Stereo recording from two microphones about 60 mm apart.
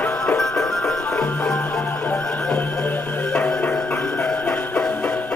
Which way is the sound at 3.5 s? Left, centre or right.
Centre.